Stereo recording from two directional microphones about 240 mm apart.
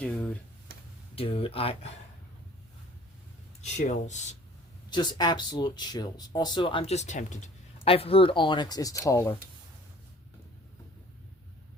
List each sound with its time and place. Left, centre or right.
0.0 s speech: centre
1.1 s speech: left
3.6 s speech: left
4.9 s speech: centre